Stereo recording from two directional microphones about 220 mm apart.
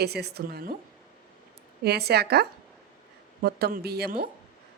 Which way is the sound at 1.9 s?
45° right (ahead or behind).